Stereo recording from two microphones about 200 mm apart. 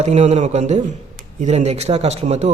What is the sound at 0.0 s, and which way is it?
Speech, 35° right (ahead or behind).